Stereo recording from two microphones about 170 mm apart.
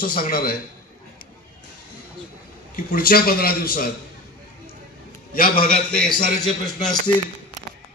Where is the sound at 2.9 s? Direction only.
60° left (ahead or behind).